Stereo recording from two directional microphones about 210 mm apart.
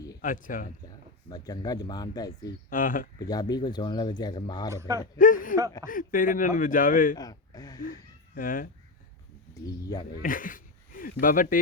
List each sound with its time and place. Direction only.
0.2 s speech: 40° left (ahead or behind)
1.3 s speech: 20° left (ahead or behind)
2.6 s speech: 40° left (ahead or behind)
3.2 s speech: 20° left (ahead or behind)
4.7 s a man's voice: 15° right (ahead or behind)
5.1 s speech: 40° left (ahead or behind)
7.2 s speech: 20° left (ahead or behind)
8.4 s speech: 40° left (ahead or behind)
9.8 s speech: 15° left (ahead or behind)
10.1 s speech: 45° left (ahead or behind)